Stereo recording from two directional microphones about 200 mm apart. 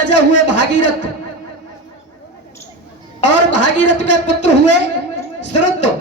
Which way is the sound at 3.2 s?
35° left (ahead or behind).